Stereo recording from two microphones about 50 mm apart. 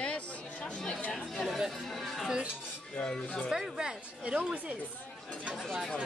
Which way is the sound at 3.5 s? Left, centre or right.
Centre.